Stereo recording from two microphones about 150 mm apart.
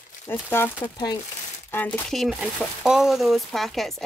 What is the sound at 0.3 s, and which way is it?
Speech, 15° left (ahead or behind).